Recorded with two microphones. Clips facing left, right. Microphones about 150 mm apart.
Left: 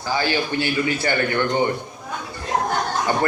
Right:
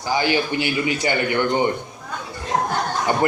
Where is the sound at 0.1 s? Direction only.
15° right (ahead or behind).